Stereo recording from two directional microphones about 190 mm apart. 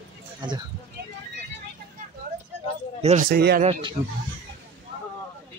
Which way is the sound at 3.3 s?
55° right (ahead or behind).